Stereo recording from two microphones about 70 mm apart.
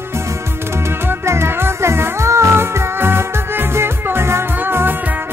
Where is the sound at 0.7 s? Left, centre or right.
Right.